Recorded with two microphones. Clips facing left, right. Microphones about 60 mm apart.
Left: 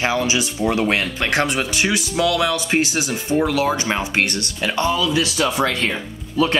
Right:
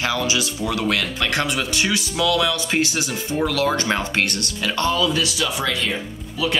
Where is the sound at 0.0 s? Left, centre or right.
Left.